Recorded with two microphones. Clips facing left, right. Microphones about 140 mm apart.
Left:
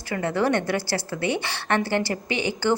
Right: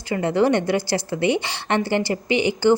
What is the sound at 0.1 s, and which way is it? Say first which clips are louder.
A woman's voice: right 4 dB; 20° right (ahead or behind).